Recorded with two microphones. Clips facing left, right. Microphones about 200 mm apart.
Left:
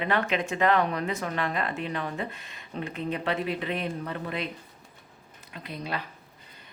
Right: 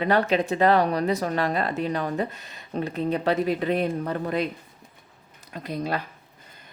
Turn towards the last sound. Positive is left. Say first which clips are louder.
# right 6 dB
turn(degrees=-40)  # may be behind; listen again after turning